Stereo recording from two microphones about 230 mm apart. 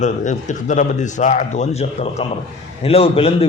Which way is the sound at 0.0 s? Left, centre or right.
Left.